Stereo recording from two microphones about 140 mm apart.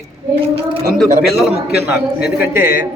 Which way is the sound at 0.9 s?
Centre (ahead or behind).